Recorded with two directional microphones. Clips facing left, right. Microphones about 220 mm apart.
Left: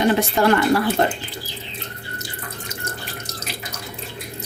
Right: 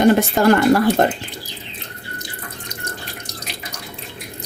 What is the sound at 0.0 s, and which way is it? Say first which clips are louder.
Speech: right 4 dB; 45° right (ahead or behind).